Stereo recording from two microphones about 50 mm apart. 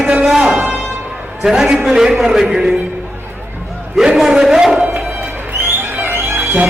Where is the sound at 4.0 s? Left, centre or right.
Centre.